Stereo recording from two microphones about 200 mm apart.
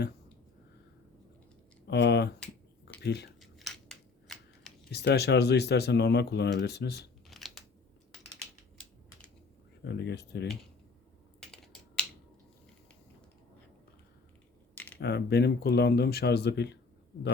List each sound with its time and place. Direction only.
1.9 s speech: 60° left (ahead or behind)
3.4 s scissors: centre (ahead or behind)
4.9 s speech: 55° left (ahead or behind)
7.3 s scissors: centre (ahead or behind)
9.8 s speech: 55° left (ahead or behind)
11.3 s typing: 5° left (ahead or behind)
15.0 s speech: 55° left (ahead or behind)